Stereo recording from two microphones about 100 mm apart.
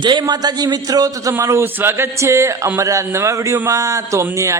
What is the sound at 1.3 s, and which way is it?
A man's voice, 25° right (ahead or behind).